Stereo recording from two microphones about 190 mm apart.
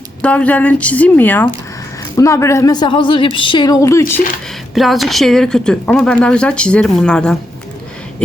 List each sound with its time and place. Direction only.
0.2 s a woman's voice: 5° left (ahead or behind)
4.7 s speech: centre (ahead or behind)